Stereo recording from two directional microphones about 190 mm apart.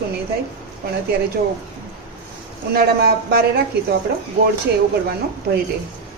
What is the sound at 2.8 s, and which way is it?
Speech, 55° right (ahead or behind).